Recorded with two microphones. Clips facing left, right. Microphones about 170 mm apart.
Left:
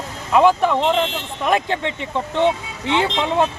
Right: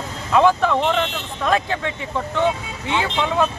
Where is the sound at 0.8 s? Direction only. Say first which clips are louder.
Left 2 dB; 25° left (ahead or behind).